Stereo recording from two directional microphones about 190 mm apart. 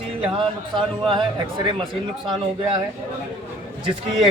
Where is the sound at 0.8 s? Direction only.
25° right (ahead or behind).